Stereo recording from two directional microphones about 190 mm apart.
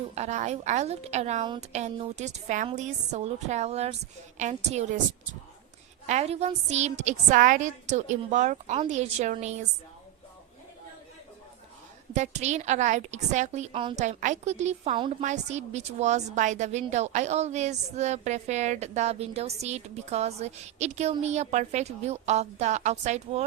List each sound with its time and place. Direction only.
0.1 s a woman's voice: 35° right (ahead or behind)
6.1 s a woman's voice: 35° right (ahead or behind)
12.1 s a woman's voice: 35° right (ahead or behind)